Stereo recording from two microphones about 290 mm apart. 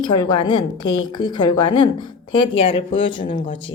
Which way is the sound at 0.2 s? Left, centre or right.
Centre.